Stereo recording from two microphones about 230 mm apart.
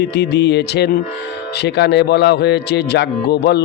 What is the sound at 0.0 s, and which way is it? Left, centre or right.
A man's voice, left.